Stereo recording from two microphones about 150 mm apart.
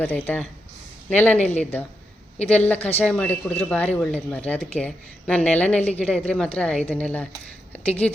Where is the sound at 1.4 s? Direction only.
50° left (ahead or behind).